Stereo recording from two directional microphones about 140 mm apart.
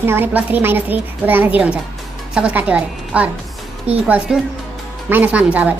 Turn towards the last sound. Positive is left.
turn(degrees=-10)  # may be behind; listen again after turning